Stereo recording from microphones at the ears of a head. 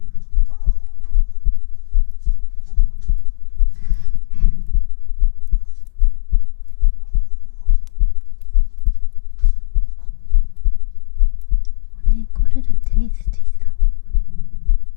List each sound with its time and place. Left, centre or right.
0.0 s a sound: left
1.1 s heart sounds: left
11.9 s whispering: left